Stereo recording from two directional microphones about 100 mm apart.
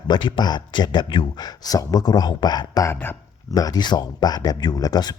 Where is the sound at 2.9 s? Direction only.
20° left (ahead or behind).